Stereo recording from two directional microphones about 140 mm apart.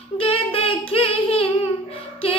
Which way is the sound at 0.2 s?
40° left (ahead or behind).